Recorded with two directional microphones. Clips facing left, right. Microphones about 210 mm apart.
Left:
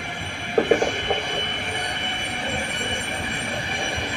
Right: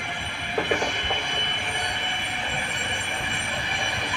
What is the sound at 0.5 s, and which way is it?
Train, 45° left (ahead or behind).